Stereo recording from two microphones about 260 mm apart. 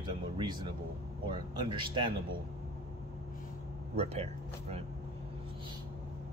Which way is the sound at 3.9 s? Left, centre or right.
Right.